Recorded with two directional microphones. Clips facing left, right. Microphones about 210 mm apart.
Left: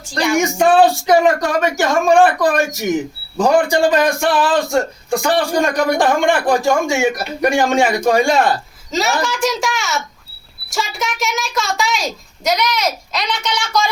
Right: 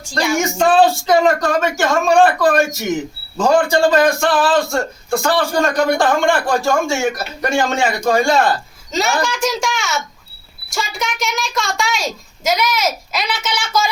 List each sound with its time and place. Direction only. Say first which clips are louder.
0.3 s speech: left 1 dB; 15° left (ahead or behind)
8.9 s a woman's voice: even; centre (ahead or behind)